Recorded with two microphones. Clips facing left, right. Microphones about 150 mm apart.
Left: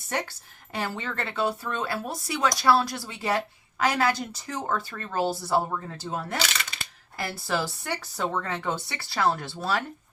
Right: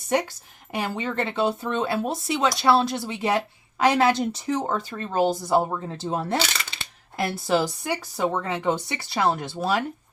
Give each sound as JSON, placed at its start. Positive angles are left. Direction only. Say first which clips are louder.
{"t": 0.1, "sound": "a woman's voice", "louder": "right 7 dB", "side_deg": -15}